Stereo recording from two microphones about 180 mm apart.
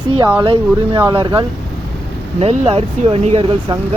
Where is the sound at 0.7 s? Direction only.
15° right (ahead or behind).